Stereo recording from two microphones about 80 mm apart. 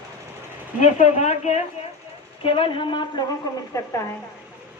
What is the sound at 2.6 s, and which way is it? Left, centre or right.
Speech, left.